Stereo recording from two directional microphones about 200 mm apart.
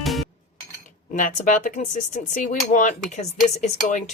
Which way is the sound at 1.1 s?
40° left (ahead or behind).